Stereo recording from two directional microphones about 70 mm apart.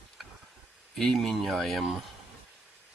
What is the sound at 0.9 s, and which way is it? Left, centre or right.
Speech, centre.